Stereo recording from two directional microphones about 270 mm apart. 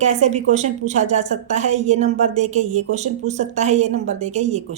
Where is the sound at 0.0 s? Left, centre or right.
Right.